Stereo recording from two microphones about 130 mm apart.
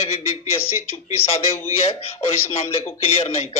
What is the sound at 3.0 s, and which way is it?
Speech, 50° left (ahead or behind).